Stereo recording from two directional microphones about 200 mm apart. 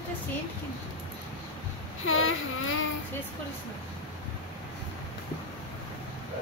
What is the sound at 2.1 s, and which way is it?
Child singing, 90° left.